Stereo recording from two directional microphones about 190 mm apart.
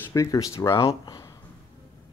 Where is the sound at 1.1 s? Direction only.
20° left (ahead or behind).